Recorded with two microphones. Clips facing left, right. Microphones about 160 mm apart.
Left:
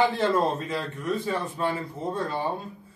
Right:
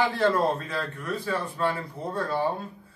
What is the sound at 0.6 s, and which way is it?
Speech, 20° left (ahead or behind).